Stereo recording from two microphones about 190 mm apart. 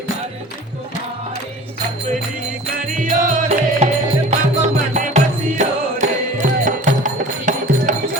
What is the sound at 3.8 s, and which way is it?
Music, 35° right (ahead or behind).